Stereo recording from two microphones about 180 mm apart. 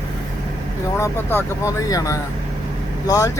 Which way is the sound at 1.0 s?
15° left (ahead or behind).